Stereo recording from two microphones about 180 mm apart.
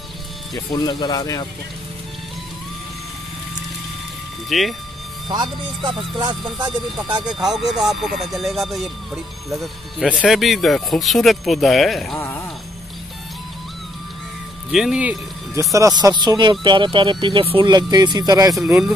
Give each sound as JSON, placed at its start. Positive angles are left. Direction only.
{"t": 0.7, "sound": "speech", "side_deg": 25}
{"t": 4.5, "sound": "speech", "side_deg": 0}
{"t": 5.3, "sound": "a man's voice", "side_deg": -25}
{"t": 7.2, "sound": "speech", "side_deg": 0}
{"t": 12.2, "sound": "speech", "side_deg": 15}
{"t": 14.7, "sound": "a man's voice", "side_deg": -5}